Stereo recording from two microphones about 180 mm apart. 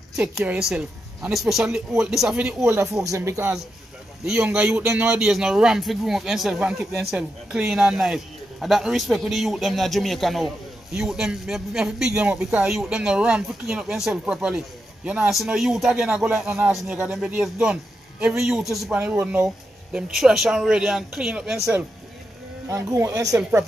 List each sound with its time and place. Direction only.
0.4 s a man's voice: centre (ahead or behind)
2.6 s speech: 15° right (ahead or behind)
4.2 s a man's voice: 5° right (ahead or behind)
22.7 s speech: 15° right (ahead or behind)